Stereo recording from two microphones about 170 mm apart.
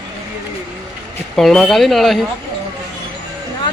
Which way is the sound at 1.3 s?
5° left (ahead or behind).